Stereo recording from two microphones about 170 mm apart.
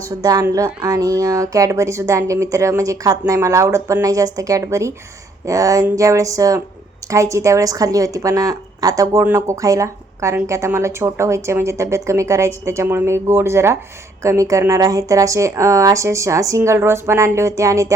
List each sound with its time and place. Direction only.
0.2 s a woman's voice: 20° right (ahead or behind)